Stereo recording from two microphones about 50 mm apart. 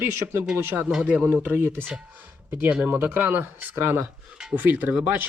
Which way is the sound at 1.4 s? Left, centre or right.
Right.